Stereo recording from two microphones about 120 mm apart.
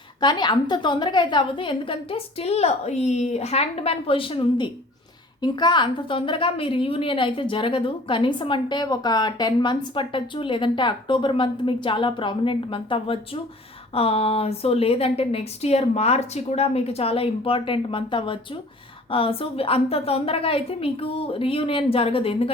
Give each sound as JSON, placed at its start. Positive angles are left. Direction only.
{"t": 0.2, "sound": "a woman's voice", "side_deg": 35}